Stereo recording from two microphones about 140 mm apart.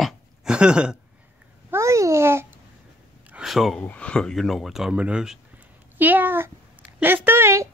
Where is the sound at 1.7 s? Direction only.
20° right (ahead or behind).